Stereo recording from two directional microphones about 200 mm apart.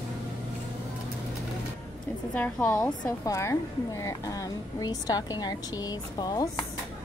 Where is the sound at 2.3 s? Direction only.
10° left (ahead or behind).